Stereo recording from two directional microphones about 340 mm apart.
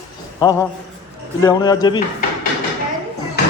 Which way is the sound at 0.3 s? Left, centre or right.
Centre.